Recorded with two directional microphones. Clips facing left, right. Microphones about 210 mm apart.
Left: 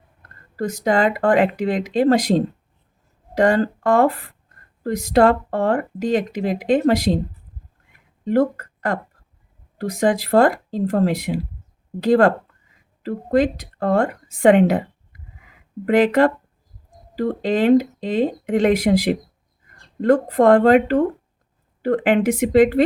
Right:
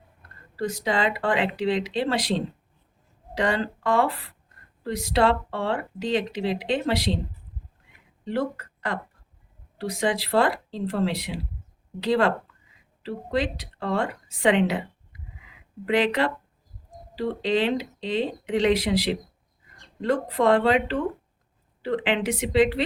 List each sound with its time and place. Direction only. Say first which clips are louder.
0.5 s speech: left 6 dB; 45° left (ahead or behind)
8.2 s a woman's voice: left 9 dB; 45° left (ahead or behind)